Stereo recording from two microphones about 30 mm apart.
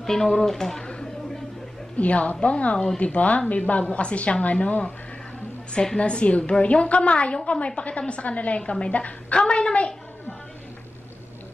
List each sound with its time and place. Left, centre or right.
0.0 s speech: centre
2.0 s a woman's voice: left
5.9 s a woman's voice: left
9.4 s speech: left